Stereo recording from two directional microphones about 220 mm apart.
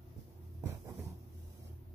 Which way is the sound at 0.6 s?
15° right (ahead or behind).